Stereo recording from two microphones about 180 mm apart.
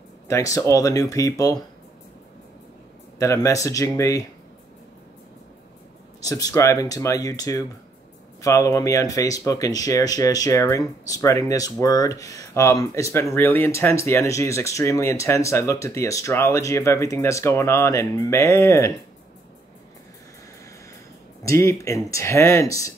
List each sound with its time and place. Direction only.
0.3 s speech: 15° left (ahead or behind)
3.2 s speech: 15° left (ahead or behind)
6.2 s speech: 20° left (ahead or behind)
21.4 s speech: 15° left (ahead or behind)